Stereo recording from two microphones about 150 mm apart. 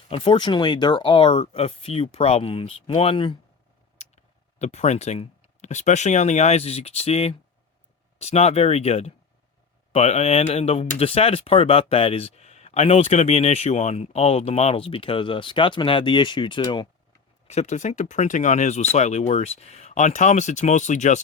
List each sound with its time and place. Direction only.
0.1 s speech: 35° left (ahead or behind)
1.3 s speech: 45° left (ahead or behind)
3.9 s a sound: 50° left (ahead or behind)
4.6 s speech: 50° left (ahead or behind); by 16.9 s 30° left (ahead or behind)
17.5 s speech: 50° left (ahead or behind)